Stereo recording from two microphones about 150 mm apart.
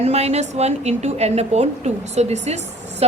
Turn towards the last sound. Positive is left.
turn(degrees=-45)  # may be behind; listen again after turning